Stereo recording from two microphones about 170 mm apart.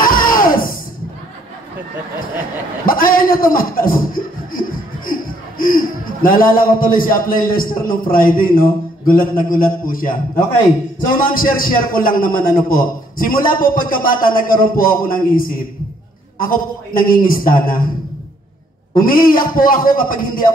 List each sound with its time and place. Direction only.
0.0 s music: 55° left (ahead or behind)
2.8 s a man's voice: 55° left (ahead or behind)
11.2 s a man's voice: 55° left (ahead or behind)
18.9 s a man's voice: 55° left (ahead or behind)